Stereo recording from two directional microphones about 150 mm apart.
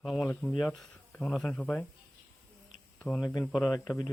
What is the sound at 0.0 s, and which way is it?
Speech, centre (ahead or behind).